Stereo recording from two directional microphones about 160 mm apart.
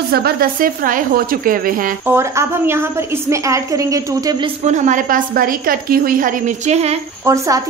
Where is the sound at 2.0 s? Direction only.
15° right (ahead or behind).